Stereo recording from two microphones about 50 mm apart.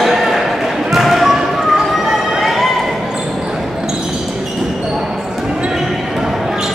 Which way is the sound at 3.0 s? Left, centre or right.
Centre.